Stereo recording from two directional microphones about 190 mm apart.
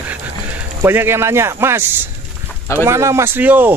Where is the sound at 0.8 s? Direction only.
10° right (ahead or behind).